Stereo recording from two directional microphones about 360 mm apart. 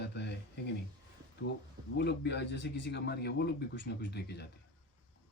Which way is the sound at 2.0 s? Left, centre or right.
Left.